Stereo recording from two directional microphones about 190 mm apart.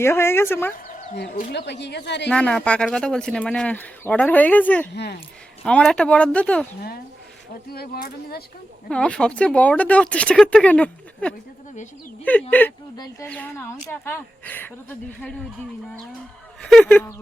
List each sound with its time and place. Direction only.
0.0 s speech: 15° left (ahead or behind)
1.5 s speech: 65° left (ahead or behind)
2.3 s speech: 5° left (ahead or behind)
7.7 s speech: 55° left (ahead or behind)
8.9 s speech: 5° left (ahead or behind)
16.6 s speech: 5° left (ahead or behind)